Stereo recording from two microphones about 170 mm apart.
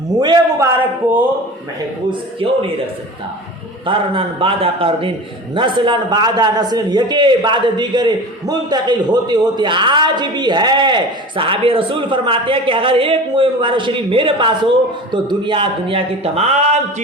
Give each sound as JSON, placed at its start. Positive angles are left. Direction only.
{"t": 0.2, "sound": "a man's voice", "side_deg": -25}
{"t": 1.0, "sound": "speech", "side_deg": -10}
{"t": 2.0, "sound": "a man's voice", "side_deg": -30}
{"t": 3.8, "sound": "a man's voice", "side_deg": -30}